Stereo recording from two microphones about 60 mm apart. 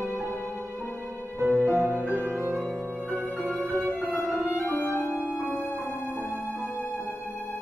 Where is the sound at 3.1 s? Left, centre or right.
Right.